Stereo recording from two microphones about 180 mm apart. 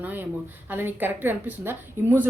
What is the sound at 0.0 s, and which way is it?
A woman's voice, 10° right (ahead or behind).